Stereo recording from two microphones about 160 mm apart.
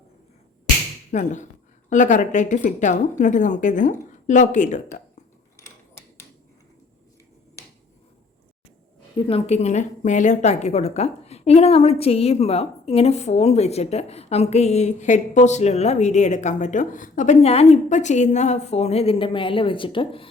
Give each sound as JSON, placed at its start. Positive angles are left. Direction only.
{"t": 1.1, "sound": "a woman's voice", "side_deg": 50}
{"t": 9.1, "sound": "a woman's voice", "side_deg": 35}